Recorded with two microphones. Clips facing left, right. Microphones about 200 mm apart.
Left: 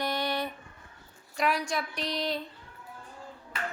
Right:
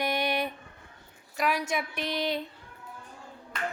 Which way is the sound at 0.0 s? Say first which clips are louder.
Right 2 dB; 15° right (ahead or behind).